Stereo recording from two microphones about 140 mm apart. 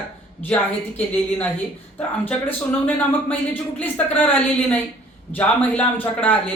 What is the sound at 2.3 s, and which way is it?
A man's voice, 10° left (ahead or behind).